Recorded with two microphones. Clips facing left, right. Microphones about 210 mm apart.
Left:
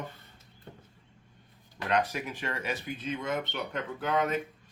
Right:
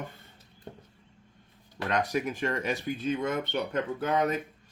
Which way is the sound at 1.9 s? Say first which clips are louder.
Right 1 dB; 45° right (ahead or behind).